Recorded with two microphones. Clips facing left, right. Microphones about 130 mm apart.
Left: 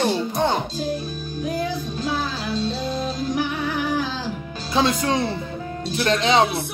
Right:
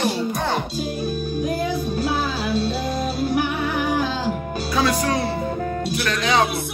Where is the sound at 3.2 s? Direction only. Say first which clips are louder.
Right 2 dB; 55° right (ahead or behind).